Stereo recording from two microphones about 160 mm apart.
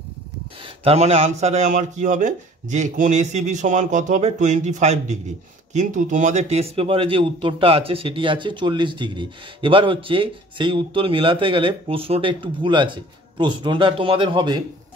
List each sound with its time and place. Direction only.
0.8 s speech: 45° right (ahead or behind)